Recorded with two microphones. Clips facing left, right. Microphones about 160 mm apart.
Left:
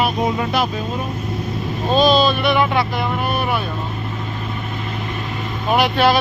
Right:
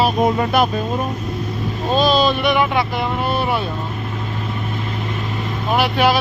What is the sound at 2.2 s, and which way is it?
Speech, 20° right (ahead or behind).